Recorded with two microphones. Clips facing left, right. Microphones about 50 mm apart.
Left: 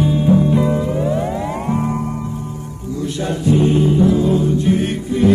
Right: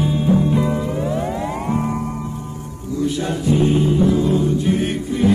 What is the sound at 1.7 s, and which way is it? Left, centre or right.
Music, left.